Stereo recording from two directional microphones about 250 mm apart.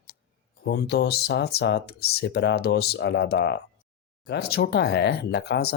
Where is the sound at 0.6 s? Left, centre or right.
Left.